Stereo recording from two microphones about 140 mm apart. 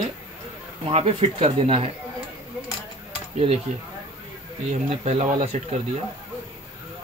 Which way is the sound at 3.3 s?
45° right (ahead or behind).